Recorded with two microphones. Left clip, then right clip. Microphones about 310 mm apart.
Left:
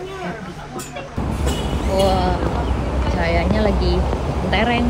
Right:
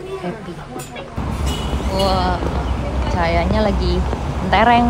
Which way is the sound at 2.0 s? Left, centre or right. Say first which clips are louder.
Right 2 dB; centre.